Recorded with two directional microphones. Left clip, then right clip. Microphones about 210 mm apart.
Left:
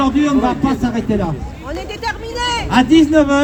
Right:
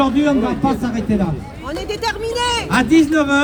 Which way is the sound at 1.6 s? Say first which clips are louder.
Right 1 dB; 50° right (ahead or behind).